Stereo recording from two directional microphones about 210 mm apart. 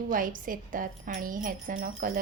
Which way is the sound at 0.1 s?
40° right (ahead or behind).